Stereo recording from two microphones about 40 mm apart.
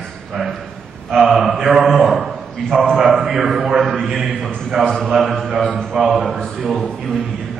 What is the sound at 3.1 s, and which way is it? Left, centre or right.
A man's voice, centre.